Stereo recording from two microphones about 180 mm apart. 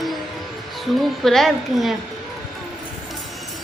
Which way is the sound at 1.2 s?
Centre (ahead or behind).